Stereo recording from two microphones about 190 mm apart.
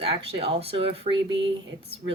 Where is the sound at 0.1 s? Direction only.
30° right (ahead or behind).